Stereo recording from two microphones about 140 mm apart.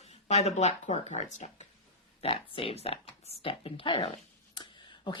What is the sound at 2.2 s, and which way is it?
Speech, 40° left (ahead or behind).